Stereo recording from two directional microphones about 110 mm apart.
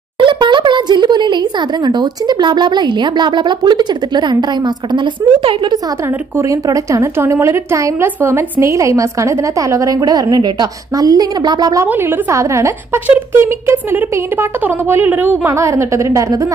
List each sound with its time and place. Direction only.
0.2 s speech: 45° right (ahead or behind)
6.0 s a woman's voice: 25° right (ahead or behind)
11.8 s a woman's voice: 20° right (ahead or behind)
15.5 s a woman's voice: 25° right (ahead or behind)